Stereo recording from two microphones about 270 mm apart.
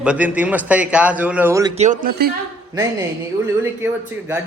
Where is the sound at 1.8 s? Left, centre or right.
Right.